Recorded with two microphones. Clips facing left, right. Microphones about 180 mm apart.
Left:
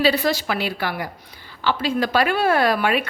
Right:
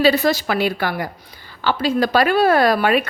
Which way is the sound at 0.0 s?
45° right (ahead or behind).